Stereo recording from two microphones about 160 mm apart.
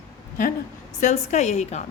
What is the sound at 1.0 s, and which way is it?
Speech, 50° left (ahead or behind).